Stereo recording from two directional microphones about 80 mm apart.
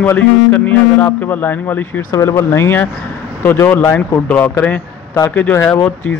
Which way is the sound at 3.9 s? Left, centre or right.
Left.